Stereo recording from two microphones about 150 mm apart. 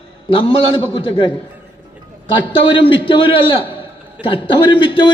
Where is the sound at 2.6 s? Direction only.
35° left (ahead or behind).